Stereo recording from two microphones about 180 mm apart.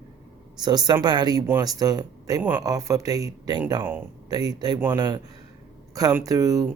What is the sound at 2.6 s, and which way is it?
Speech, 20° right (ahead or behind).